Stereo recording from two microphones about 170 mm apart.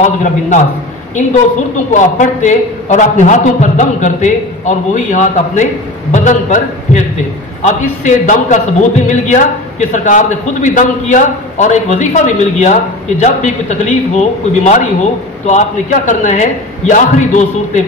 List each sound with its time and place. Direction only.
0.0 s a man's voice: 45° left (ahead or behind)
1.9 s a man's voice: 45° left (ahead or behind)